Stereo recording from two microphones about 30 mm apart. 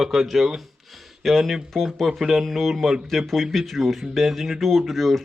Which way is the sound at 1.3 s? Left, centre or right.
Centre.